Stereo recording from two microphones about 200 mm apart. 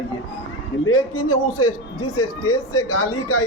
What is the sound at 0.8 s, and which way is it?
A man's voice, 90° left.